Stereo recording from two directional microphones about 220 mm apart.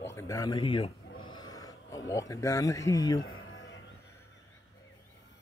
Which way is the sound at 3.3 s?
65° left (ahead or behind).